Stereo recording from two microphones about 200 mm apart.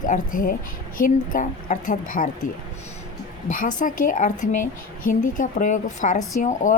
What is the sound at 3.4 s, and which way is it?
A woman's voice, 40° left (ahead or behind).